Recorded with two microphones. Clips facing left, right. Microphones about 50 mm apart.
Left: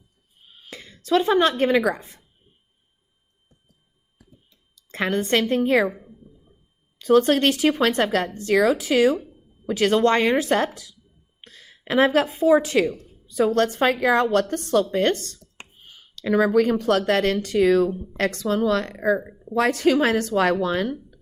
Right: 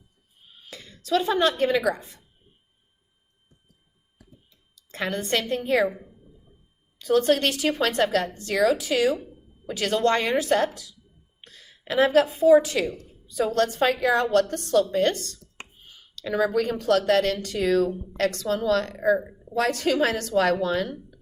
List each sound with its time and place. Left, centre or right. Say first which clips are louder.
0.7 s speech: left 3 dB; left
4.7 s a woman's voice: left 5 dB; left
7.0 s a woman's voice: left 4 dB; left